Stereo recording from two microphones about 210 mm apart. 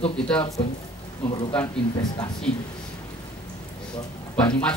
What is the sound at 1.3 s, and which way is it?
Speech, 25° left (ahead or behind).